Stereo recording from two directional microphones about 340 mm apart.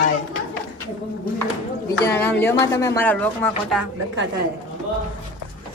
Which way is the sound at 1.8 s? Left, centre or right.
Centre.